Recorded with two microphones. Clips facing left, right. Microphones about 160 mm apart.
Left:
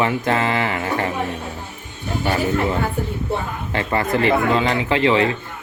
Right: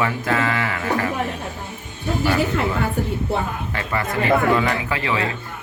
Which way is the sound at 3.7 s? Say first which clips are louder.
Left 6 dB; 30° left (ahead or behind).